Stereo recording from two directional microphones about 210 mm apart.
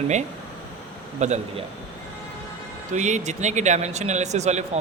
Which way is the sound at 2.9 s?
35° right (ahead or behind).